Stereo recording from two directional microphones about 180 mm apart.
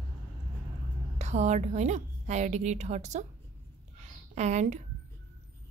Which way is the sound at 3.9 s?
40° right (ahead or behind).